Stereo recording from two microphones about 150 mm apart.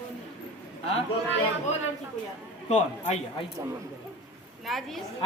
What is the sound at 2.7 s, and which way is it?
Speech, 45° left (ahead or behind).